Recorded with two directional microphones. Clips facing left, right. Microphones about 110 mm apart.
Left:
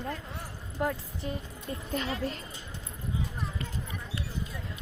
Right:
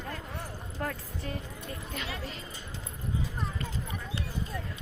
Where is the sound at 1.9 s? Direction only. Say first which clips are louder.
Left 8 dB; 40° left (ahead or behind).